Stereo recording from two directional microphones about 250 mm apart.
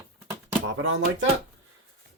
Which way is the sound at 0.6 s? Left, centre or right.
Right.